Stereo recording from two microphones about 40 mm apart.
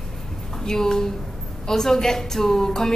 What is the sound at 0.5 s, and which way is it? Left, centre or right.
A woman's voice, centre.